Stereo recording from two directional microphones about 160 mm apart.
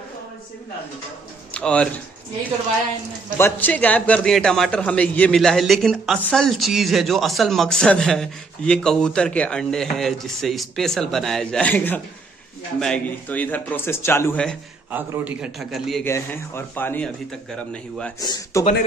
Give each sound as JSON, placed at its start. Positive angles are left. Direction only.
{"t": 1.5, "sound": "a man's voice", "side_deg": 5}
{"t": 3.3, "sound": "a man's voice", "side_deg": 15}
{"t": 14.9, "sound": "a man's voice", "side_deg": -10}
{"t": 16.0, "sound": "a man's voice", "side_deg": 15}
{"t": 18.2, "sound": "a man's voice", "side_deg": 25}